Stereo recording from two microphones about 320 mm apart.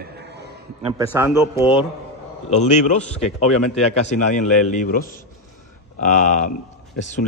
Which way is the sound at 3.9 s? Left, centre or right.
Left.